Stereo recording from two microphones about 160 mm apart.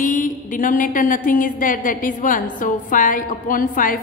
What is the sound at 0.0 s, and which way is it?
A woman's voice, 55° left (ahead or behind).